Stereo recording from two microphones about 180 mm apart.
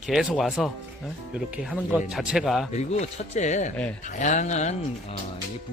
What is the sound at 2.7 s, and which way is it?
Speech, 40° left (ahead or behind).